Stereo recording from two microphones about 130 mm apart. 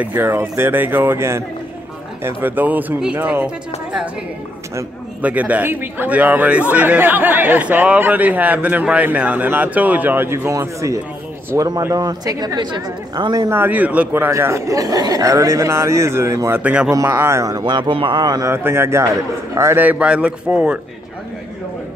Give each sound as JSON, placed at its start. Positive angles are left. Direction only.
{"t": 0.0, "sound": "a man's voice", "side_deg": -15}
{"t": 5.2, "sound": "a man's voice", "side_deg": -10}
{"t": 13.5, "sound": "speech", "side_deg": -15}
{"t": 16.6, "sound": "a man's voice", "side_deg": -10}
{"t": 16.9, "sound": "a man's voice", "side_deg": -20}
{"t": 18.5, "sound": "a man's voice", "side_deg": -20}